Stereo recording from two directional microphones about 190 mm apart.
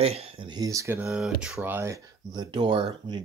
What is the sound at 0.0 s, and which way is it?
Speech, 30° right (ahead or behind).